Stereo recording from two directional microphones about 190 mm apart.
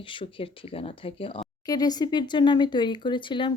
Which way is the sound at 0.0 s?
25° left (ahead or behind).